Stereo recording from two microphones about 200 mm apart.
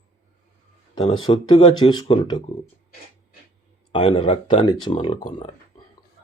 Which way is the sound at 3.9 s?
25° left (ahead or behind).